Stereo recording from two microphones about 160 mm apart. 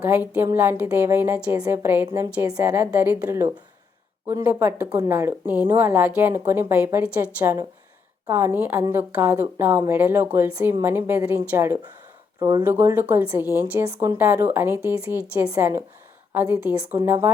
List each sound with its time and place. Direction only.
0.0 s a woman's voice: 10° right (ahead or behind)